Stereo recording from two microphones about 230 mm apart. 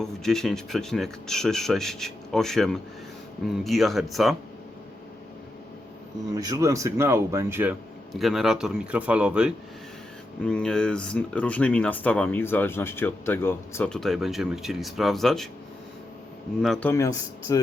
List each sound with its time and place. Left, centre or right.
0.0 s speech: centre
6.3 s speech: centre
16.6 s a man's voice: centre